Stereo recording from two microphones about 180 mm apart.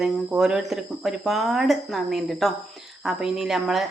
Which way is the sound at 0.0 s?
Centre (ahead or behind).